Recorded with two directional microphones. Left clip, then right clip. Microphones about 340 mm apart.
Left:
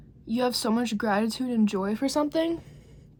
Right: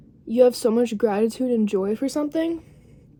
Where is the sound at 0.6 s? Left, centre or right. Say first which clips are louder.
Right 7 dB; left.